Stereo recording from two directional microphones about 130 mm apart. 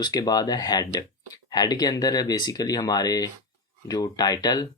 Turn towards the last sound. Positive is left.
turn(degrees=30)  # may be behind; listen again after turning